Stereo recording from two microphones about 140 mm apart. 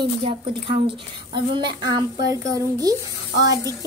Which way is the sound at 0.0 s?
40° right (ahead or behind).